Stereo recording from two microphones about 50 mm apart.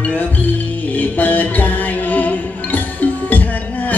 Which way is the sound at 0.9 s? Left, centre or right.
Left.